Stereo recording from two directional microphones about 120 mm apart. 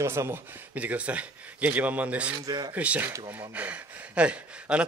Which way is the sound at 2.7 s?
10° right (ahead or behind).